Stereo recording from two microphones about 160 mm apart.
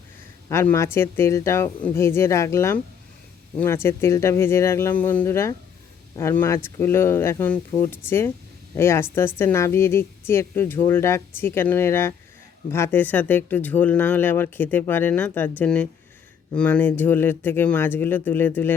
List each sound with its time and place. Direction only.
0.4 s speech: 15° left (ahead or behind)